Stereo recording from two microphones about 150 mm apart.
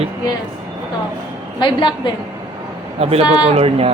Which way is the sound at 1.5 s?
30° left (ahead or behind).